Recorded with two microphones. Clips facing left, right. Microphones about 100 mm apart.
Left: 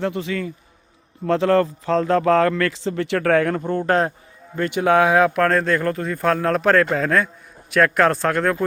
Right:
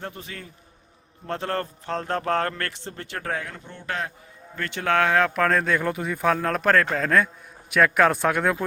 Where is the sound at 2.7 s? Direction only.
90° left; by 4.1 s 40° left (ahead or behind).